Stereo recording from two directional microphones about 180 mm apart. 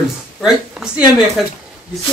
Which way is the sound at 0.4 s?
Centre (ahead or behind).